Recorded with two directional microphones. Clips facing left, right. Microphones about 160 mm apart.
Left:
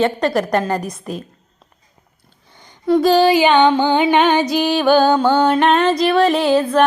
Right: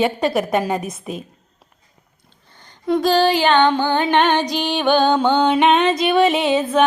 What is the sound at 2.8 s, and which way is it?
Music, 5° left (ahead or behind).